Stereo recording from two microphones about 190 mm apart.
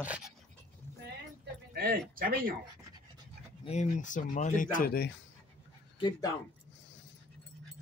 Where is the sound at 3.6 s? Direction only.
40° left (ahead or behind).